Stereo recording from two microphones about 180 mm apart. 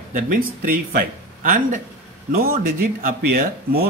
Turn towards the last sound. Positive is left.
turn(degrees=-55)  # may be behind; listen again after turning